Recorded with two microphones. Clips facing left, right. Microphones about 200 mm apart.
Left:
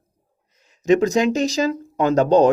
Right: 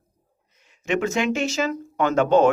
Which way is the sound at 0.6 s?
40° left (ahead or behind).